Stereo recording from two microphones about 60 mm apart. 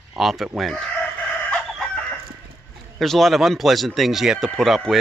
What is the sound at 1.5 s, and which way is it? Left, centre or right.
Chicken, centre.